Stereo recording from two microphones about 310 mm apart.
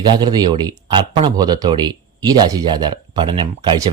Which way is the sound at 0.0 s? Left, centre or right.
Centre.